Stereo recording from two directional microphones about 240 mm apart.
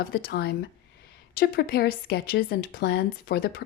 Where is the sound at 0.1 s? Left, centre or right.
Left.